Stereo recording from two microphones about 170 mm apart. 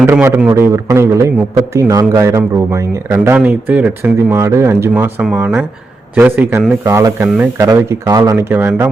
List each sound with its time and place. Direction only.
0.0 s speech: 15° right (ahead or behind)